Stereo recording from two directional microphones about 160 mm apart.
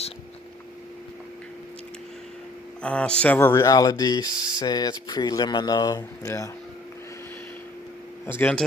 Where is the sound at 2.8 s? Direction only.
5° left (ahead or behind).